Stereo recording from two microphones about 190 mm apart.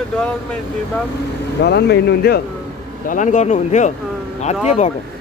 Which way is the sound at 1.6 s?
60° left (ahead or behind).